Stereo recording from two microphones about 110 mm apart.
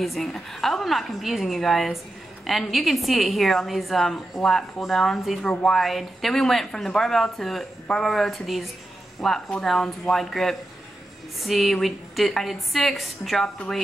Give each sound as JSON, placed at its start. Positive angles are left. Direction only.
{"t": 0.0, "sound": "a woman's voice", "side_deg": 0}